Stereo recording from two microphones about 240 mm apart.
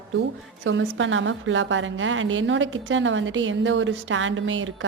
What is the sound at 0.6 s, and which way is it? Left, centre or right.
A woman's voice, right.